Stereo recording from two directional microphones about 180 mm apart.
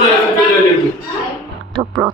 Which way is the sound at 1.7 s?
20° right (ahead or behind).